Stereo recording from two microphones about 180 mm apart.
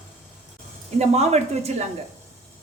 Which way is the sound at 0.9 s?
35° right (ahead or behind).